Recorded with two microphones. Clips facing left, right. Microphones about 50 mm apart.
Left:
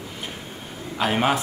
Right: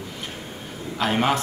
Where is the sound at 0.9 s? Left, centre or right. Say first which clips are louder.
Even; centre.